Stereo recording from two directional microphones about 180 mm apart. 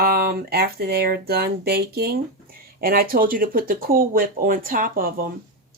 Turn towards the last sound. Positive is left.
turn(degrees=-50)  # may be behind; listen again after turning